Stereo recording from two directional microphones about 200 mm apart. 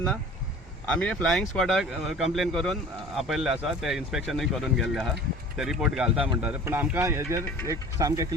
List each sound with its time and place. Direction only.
0.9 s speech: 5° left (ahead or behind); by 8.4 s 15° right (ahead or behind)